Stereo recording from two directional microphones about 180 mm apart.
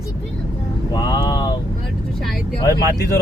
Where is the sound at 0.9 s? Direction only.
20° left (ahead or behind).